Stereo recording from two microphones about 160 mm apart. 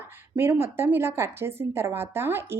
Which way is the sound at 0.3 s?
15° right (ahead or behind).